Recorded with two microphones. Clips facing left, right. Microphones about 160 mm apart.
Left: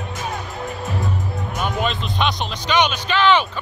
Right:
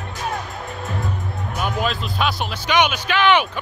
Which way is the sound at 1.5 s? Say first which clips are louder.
Even; 5° right (ahead or behind).